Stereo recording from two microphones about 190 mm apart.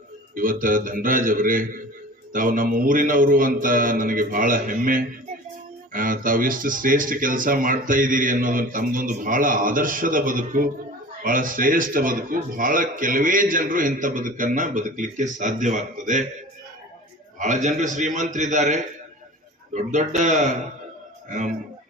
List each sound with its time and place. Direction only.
0.3 s speech: 45° right (ahead or behind)
17.4 s a man's voice: 40° right (ahead or behind)